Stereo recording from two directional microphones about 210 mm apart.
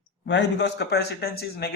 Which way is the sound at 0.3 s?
55° left (ahead or behind).